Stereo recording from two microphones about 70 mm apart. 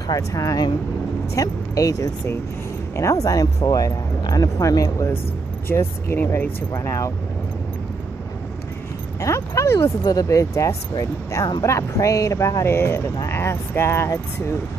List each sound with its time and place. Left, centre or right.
0.1 s speech: left
3.6 s speech: left
5.7 s speech: left
6.7 s speech: left
9.2 s speech: left
10.0 s speech: left